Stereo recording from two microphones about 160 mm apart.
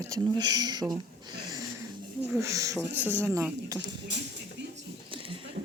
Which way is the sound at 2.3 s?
20° right (ahead or behind).